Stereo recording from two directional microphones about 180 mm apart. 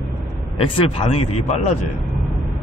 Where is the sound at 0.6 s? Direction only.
30° left (ahead or behind).